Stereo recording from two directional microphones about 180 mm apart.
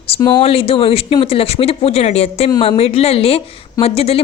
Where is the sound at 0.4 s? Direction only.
35° left (ahead or behind).